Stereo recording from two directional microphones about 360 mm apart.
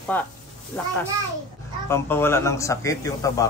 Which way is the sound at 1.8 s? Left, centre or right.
Centre.